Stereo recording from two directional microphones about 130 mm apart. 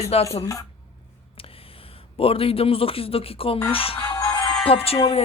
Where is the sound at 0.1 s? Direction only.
50° left (ahead or behind).